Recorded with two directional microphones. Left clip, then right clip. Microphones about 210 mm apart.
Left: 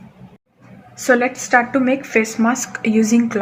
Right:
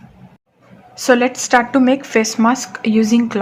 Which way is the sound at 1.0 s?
40° right (ahead or behind).